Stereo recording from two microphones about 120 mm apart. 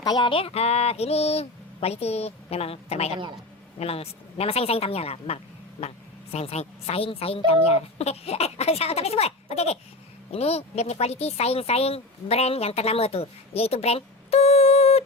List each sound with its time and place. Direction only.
0.0 s a woman's voice: 40° left (ahead or behind); by 15.0 s 60° left (ahead or behind)